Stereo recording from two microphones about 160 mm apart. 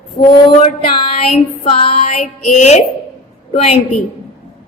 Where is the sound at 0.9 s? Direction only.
40° left (ahead or behind).